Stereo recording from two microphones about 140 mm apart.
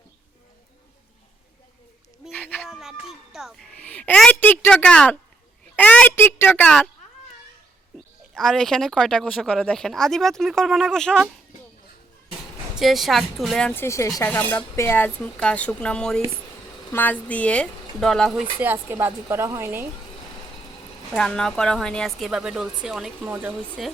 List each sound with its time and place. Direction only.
2.3 s a sound: 10° left (ahead or behind)
2.6 s a woman's voice: 5° right (ahead or behind); by 6.7 s 15° left (ahead or behind)
8.3 s speech: 5° left (ahead or behind)
12.8 s speech: centre (ahead or behind)
13.8 s speech: 20° left (ahead or behind); by 18.4 s centre (ahead or behind)
18.6 s speech: 15° right (ahead or behind)
21.1 s speech: 5° left (ahead or behind)